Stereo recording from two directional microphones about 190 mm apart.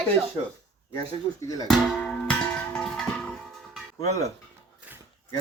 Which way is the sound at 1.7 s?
5° left (ahead or behind).